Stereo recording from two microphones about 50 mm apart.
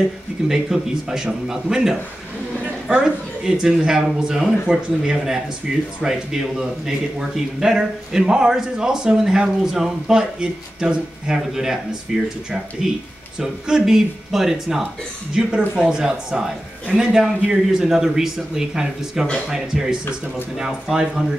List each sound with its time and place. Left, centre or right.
0.5 s speech: centre